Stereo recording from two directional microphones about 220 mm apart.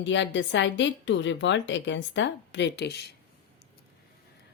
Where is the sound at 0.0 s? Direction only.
55° left (ahead or behind).